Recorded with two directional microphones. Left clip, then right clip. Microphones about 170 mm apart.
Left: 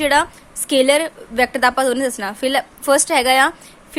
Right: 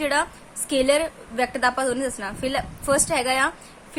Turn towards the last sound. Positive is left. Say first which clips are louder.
# left 6 dB
turn(degrees=45)  # may be behind; listen again after turning